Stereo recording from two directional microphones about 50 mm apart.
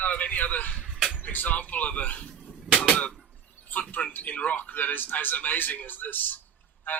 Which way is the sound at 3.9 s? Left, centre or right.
Left.